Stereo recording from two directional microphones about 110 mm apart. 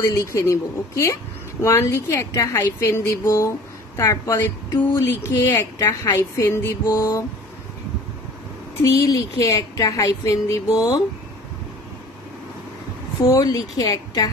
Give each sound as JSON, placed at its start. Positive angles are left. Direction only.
{"t": 0.0, "sound": "a woman's voice", "side_deg": 25}
{"t": 8.8, "sound": "a woman's voice", "side_deg": 30}
{"t": 13.3, "sound": "a woman's voice", "side_deg": 30}